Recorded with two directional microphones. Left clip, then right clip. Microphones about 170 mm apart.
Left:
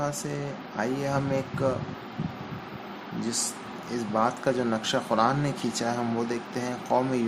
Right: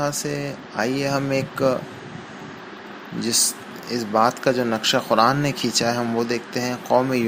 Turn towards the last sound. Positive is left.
turn(degrees=-20)  # may be behind; listen again after turning